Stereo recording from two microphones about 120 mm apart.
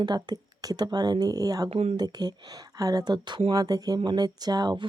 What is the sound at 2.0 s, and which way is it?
Speech, 35° right (ahead or behind).